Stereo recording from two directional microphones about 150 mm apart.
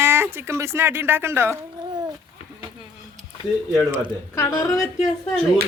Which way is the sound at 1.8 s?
30° right (ahead or behind).